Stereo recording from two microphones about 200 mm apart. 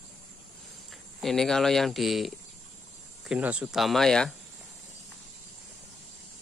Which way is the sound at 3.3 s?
5° right (ahead or behind).